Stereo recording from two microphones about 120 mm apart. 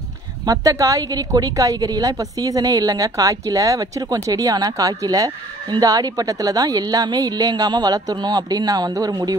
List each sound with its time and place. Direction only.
0.5 s a woman's voice: 30° right (ahead or behind)